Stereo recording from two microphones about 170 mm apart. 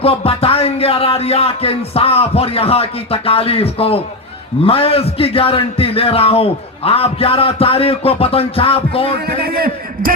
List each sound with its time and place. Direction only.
0.0 s a man's voice: 35° left (ahead or behind)
9.2 s a man's voice: 65° right (ahead or behind)